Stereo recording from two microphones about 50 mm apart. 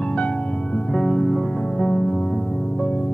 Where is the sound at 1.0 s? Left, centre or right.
Centre.